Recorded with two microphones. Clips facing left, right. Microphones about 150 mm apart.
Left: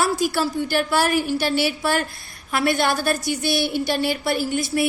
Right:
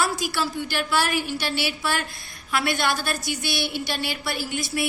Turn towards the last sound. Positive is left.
turn(degrees=45)  # may be behind; listen again after turning